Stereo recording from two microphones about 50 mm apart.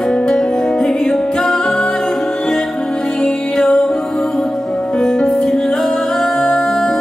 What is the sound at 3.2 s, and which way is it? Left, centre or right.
Music, centre.